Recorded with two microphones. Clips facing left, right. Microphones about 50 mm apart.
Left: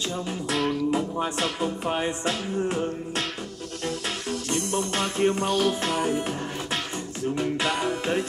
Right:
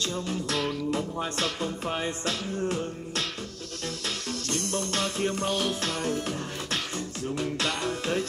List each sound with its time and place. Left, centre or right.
0.1 s music: centre